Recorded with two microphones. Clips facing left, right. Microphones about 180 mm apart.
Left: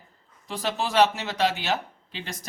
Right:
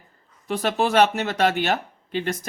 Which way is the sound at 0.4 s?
55° right (ahead or behind).